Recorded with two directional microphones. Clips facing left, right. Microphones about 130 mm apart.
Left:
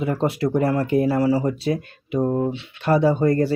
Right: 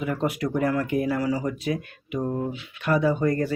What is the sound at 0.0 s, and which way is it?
Speech, 30° left (ahead or behind).